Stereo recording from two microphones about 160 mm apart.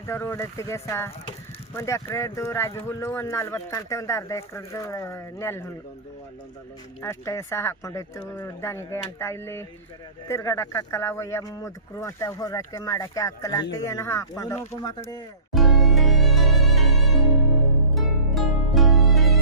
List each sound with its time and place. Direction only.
0.0 s speech: 15° left (ahead or behind)
7.0 s speech: 15° left (ahead or behind)
15.5 s music: centre (ahead or behind)